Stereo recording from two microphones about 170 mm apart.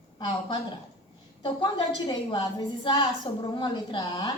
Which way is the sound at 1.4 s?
30° left (ahead or behind).